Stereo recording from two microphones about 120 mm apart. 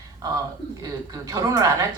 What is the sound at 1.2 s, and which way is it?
Speech, 30° right (ahead or behind).